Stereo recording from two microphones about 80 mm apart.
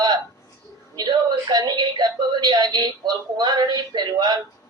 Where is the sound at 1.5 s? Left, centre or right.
Right.